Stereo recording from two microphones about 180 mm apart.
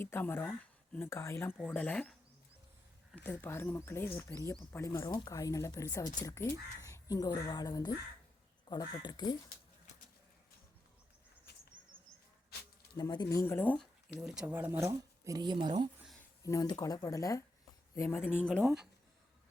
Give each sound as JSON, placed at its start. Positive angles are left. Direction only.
{"t": 0.0, "sound": "speech", "side_deg": 10}
{"t": 3.2, "sound": "speech", "side_deg": 10}
{"t": 13.0, "sound": "speech", "side_deg": 25}
{"t": 14.2, "sound": "speech", "side_deg": -5}
{"t": 16.4, "sound": "speech", "side_deg": 20}